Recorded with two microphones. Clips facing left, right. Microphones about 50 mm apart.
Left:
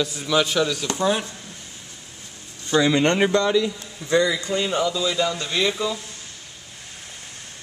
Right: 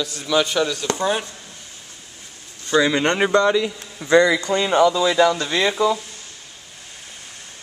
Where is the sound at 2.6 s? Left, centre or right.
Centre.